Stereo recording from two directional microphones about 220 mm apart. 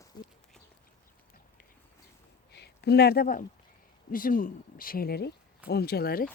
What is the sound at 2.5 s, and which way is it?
Speech, 50° left (ahead or behind).